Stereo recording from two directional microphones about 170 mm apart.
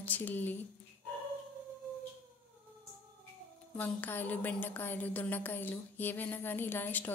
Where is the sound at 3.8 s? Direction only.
10° left (ahead or behind).